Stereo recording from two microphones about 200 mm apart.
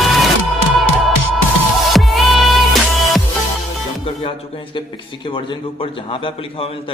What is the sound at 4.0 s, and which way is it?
A man's voice, 25° left (ahead or behind).